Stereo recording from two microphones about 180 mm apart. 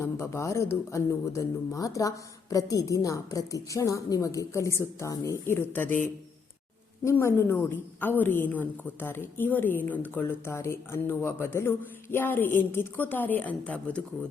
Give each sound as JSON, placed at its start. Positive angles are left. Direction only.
{"t": 0.0, "sound": "a woman's voice", "side_deg": 15}
{"t": 7.0, "sound": "a woman's voice", "side_deg": 15}